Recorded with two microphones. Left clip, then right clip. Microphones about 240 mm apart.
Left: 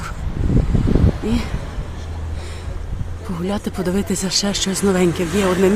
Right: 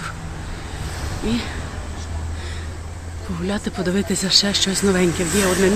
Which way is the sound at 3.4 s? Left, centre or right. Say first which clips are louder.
Left 1 dB; centre.